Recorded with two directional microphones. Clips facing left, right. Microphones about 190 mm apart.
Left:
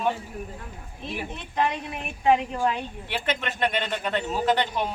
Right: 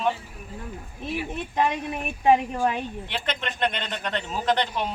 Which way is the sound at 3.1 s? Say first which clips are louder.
Left 4 dB; 5° left (ahead or behind).